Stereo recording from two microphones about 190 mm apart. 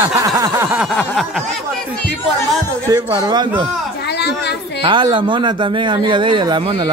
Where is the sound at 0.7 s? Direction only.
Centre (ahead or behind).